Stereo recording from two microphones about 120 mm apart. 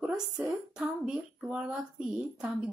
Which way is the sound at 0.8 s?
5° right (ahead or behind).